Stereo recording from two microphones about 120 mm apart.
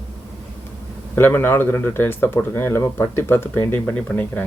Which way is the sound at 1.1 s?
15° left (ahead or behind).